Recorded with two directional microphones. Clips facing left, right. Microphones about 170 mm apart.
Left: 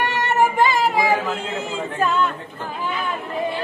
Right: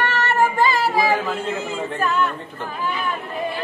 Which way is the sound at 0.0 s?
15° left (ahead or behind).